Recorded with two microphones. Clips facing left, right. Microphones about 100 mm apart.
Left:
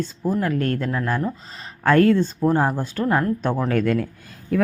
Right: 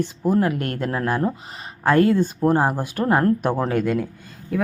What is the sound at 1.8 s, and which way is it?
A woman's voice, 10° right (ahead or behind).